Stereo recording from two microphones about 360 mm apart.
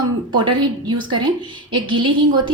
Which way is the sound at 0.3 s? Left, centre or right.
Centre.